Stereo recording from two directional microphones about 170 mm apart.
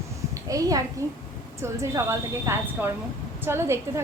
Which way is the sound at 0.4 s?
20° right (ahead or behind).